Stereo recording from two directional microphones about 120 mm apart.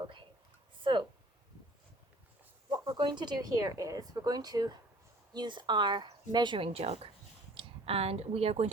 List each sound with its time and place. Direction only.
0.9 s a sound: 40° right (ahead or behind)
2.8 s speech: 40° right (ahead or behind)
6.7 s speech: 55° right (ahead or behind)